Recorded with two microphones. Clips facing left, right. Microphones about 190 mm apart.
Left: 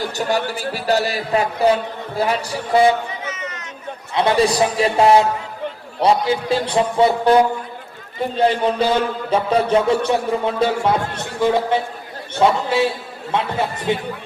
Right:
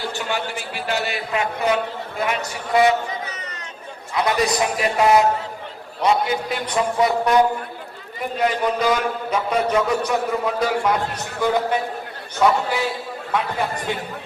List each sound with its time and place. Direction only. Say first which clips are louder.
0.0 s a man's voice: left 5 dB; 40° left (ahead or behind)
4.1 s a man's voice: left 4 dB; 30° left (ahead or behind)